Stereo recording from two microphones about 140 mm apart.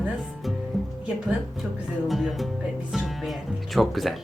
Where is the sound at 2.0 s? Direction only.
Centre (ahead or behind).